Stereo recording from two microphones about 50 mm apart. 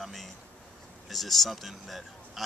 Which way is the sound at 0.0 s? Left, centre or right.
Centre.